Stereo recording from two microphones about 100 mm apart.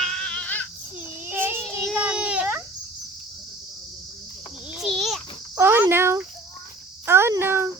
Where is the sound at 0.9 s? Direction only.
20° right (ahead or behind).